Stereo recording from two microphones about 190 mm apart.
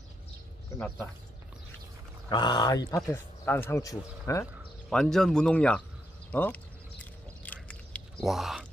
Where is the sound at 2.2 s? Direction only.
25° left (ahead or behind).